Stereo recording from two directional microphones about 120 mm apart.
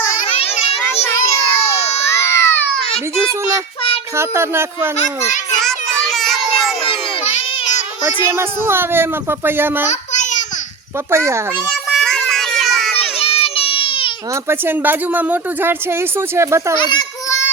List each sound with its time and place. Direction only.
0.3 s children playing: 55° left (ahead or behind)
1.0 s child singing: 25° left (ahead or behind)
2.0 s baby cry: 25° left (ahead or behind)
4.2 s a woman's voice: 20° right (ahead or behind)
5.5 s child singing: 5° left (ahead or behind)
8.0 s a woman's voice: 20° right (ahead or behind)
9.9 s a sound: 80° left
11.1 s a woman's voice: 20° right (ahead or behind)
11.7 s child singing: centre (ahead or behind)
13.0 s a sound: 55° left (ahead or behind)
14.5 s a woman's voice: 15° right (ahead or behind)
16.7 s a child's voice: 40° left (ahead or behind)
17.2 s a sound: 25° left (ahead or behind)